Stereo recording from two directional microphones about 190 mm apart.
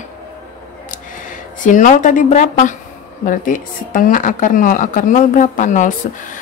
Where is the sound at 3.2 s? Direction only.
45° left (ahead or behind).